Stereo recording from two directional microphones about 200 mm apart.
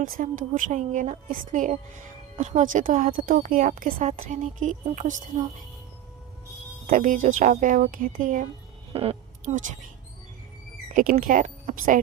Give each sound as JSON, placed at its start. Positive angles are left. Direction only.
{"t": 0.0, "sound": "speech", "side_deg": -45}
{"t": 6.8, "sound": "speech", "side_deg": -40}
{"t": 8.9, "sound": "a sound", "side_deg": -30}
{"t": 10.9, "sound": "speech", "side_deg": -45}